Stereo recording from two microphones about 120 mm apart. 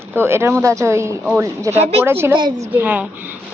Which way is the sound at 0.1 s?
20° right (ahead or behind).